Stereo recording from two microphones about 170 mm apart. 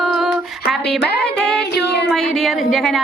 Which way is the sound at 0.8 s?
80° left.